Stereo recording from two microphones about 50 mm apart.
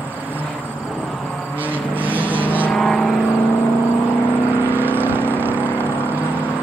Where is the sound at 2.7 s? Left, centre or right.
Centre.